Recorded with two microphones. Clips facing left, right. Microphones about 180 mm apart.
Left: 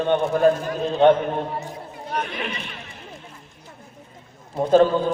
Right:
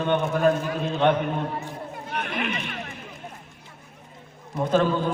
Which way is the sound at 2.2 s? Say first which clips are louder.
Right 1 dB; 50° right (ahead or behind).